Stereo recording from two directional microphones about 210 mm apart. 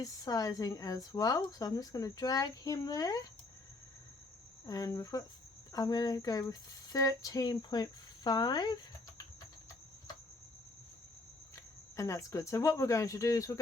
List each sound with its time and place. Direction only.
0.0 s a woman's voice: 15° left (ahead or behind)
4.6 s a woman's voice: 15° left (ahead or behind)
11.5 s speech: 15° left (ahead or behind)